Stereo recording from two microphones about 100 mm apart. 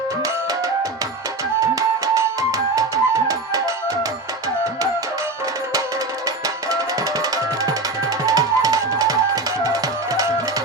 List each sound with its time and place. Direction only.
1.7 s music: 35° right (ahead or behind)
7.2 s music: 35° right (ahead or behind)